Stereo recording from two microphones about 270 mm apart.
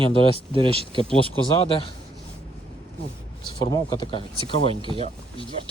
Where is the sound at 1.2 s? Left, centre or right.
Centre.